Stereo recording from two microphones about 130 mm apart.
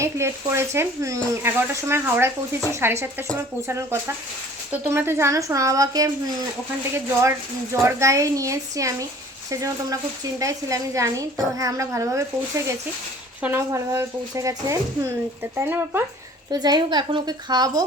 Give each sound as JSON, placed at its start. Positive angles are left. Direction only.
{"t": 0.0, "sound": "a woman's voice", "side_deg": -20}
{"t": 7.2, "sound": "a woman's voice", "side_deg": -20}
{"t": 13.4, "sound": "a woman's voice", "side_deg": -20}
{"t": 16.5, "sound": "speech", "side_deg": -30}